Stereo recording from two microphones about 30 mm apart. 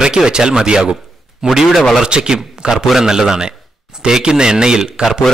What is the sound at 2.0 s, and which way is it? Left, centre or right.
A man's voice, right.